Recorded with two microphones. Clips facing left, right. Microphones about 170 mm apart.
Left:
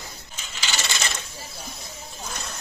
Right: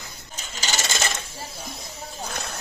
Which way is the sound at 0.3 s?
40° right (ahead or behind).